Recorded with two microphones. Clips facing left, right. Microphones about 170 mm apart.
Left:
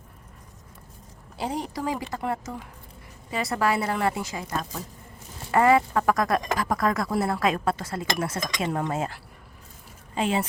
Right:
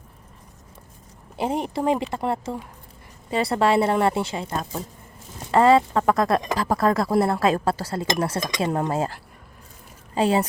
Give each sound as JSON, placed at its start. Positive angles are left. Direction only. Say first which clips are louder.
{"t": 1.4, "sound": "speech", "louder": "right 5 dB", "side_deg": -20}
{"t": 10.2, "sound": "speech", "louder": "right 5 dB", "side_deg": -40}